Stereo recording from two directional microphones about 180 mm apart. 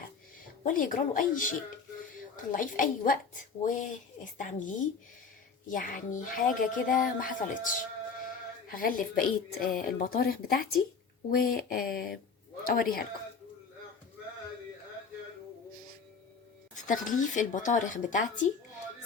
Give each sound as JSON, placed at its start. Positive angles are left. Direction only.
{"t": 0.6, "sound": "speech", "side_deg": 50}
{"t": 16.8, "sound": "speech", "side_deg": 45}